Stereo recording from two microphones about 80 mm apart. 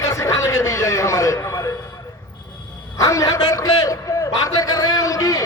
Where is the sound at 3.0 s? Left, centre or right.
Left.